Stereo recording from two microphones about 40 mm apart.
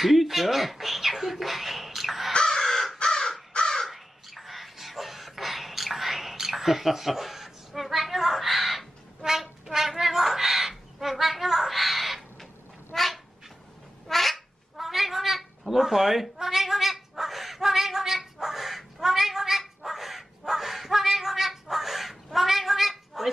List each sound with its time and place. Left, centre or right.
0.0 s speech: centre
2.3 s crow: centre
3.8 s a sound: centre
12.9 s cat: centre